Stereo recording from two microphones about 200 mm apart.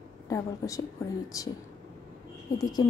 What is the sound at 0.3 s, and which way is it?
A woman's voice, 15° left (ahead or behind).